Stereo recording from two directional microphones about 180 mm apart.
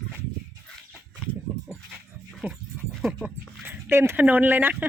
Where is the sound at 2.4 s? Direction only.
10° right (ahead or behind).